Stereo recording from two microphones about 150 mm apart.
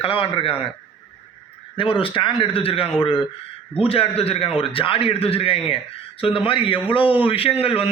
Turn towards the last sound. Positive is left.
turn(degrees=40)  # may be behind; listen again after turning